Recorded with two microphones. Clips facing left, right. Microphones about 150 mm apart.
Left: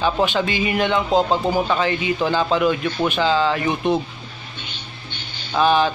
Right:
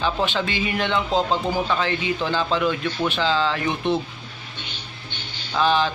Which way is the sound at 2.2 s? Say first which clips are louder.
Left 5 dB; 15° left (ahead or behind).